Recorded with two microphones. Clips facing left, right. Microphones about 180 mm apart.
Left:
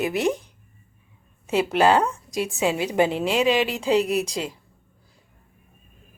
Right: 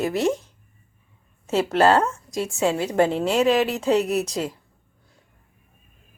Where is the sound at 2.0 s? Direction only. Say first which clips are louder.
Even; 15° left (ahead or behind).